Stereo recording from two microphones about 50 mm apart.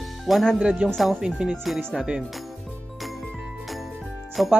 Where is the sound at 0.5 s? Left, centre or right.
Centre.